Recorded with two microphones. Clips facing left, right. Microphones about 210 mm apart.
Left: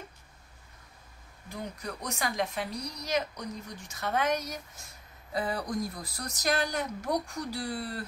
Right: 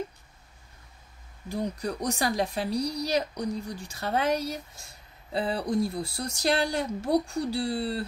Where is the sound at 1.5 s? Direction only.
35° right (ahead or behind).